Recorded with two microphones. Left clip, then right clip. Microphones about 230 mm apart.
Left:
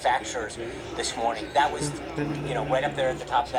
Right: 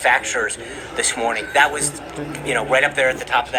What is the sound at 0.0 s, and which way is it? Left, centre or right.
A man's voice, right.